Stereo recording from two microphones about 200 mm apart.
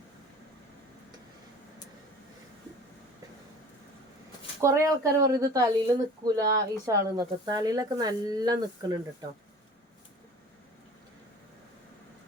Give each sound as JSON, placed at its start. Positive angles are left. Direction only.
{"t": 4.6, "sound": "speech", "side_deg": -15}